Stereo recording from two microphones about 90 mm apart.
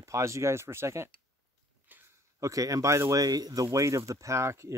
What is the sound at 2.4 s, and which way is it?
Speech, 40° right (ahead or behind).